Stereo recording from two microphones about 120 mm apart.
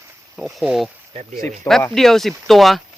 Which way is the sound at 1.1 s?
55° right (ahead or behind).